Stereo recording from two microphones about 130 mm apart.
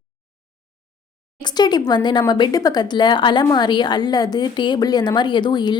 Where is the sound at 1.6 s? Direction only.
30° left (ahead or behind).